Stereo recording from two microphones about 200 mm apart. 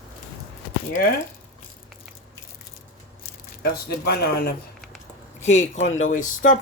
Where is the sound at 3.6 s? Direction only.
50° left (ahead or behind).